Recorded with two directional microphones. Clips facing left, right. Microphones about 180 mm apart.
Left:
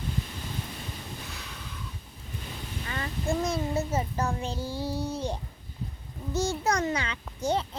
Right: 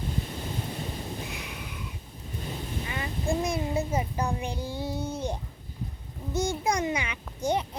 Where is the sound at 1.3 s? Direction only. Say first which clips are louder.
Right 4 dB; 15° right (ahead or behind).